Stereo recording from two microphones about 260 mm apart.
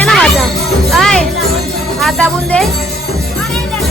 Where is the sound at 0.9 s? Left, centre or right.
Centre.